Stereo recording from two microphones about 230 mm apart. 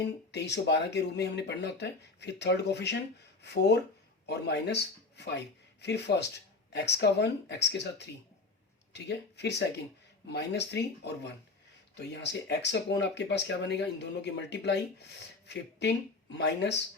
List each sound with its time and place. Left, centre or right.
0.3 s speech: left